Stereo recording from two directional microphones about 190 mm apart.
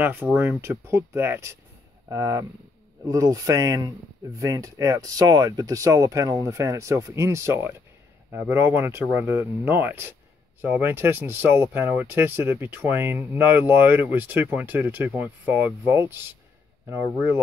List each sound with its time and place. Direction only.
0.0 s speech: 10° right (ahead or behind)